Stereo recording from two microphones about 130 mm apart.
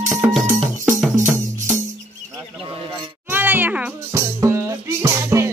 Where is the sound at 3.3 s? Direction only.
15° right (ahead or behind).